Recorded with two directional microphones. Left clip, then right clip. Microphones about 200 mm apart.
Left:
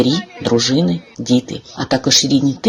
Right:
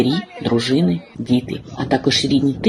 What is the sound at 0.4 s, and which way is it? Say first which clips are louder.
Speech: left 3 dB; 20° left (ahead or behind).